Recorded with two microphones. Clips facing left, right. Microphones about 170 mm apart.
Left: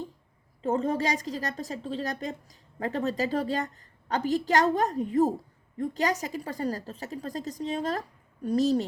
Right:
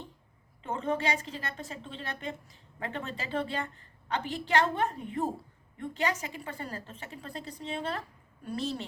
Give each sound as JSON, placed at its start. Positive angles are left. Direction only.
{"t": 0.6, "sound": "a woman's voice", "side_deg": 40}